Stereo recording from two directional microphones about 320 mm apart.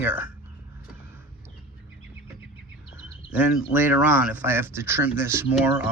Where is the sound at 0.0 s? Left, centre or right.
Centre.